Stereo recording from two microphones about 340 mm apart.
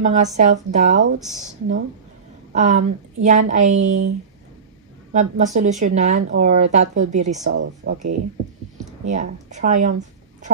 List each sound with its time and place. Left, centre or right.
0.0 s a woman's voice: right
5.1 s a woman's voice: right